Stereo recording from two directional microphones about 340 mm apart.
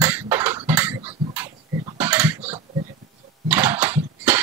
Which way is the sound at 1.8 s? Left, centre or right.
Centre.